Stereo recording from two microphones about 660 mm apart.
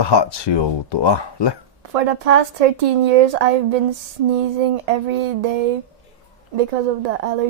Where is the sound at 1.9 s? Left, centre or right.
Right.